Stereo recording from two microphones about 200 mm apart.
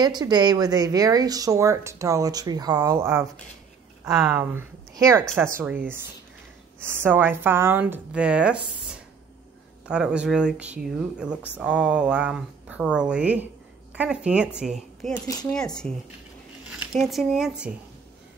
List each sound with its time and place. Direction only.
0.0 s speech: 20° right (ahead or behind)
7.0 s speech: 10° right (ahead or behind)